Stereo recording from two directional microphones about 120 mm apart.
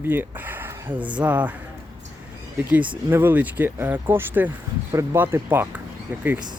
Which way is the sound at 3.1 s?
15° right (ahead or behind).